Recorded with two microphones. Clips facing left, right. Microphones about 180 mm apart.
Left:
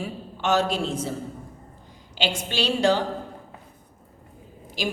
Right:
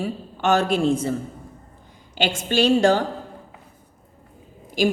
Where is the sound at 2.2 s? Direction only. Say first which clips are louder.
Right 6 dB; 50° right (ahead or behind).